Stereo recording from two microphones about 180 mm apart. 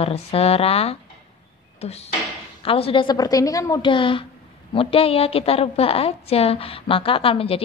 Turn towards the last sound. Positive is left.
turn(degrees=30)  # may be behind; listen again after turning